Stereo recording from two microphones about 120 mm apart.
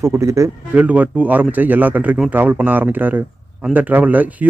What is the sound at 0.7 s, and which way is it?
Speech, 15° right (ahead or behind).